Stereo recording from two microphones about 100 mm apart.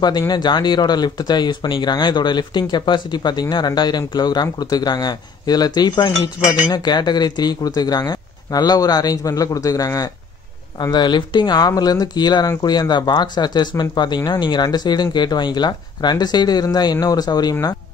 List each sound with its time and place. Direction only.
0.3 s speech: 45° left (ahead or behind)
10.8 s speech: 50° left (ahead or behind)